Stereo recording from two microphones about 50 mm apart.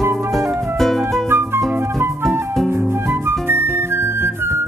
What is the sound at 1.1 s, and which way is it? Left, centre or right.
Music, right.